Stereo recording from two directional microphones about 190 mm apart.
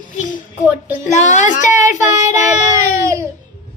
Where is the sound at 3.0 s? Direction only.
15° right (ahead or behind).